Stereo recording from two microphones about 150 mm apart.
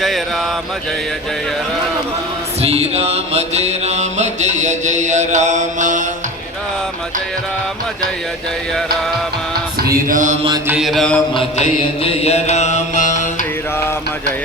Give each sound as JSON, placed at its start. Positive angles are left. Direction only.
{"t": 2.6, "sound": "mantra", "side_deg": -45}
{"t": 10.1, "sound": "mantra", "side_deg": -60}
{"t": 10.7, "sound": "mantra", "side_deg": 0}
{"t": 11.3, "sound": "mantra", "side_deg": 45}